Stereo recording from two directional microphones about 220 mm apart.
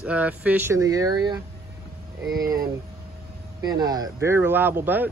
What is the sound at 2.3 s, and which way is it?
Speech, 40° right (ahead or behind).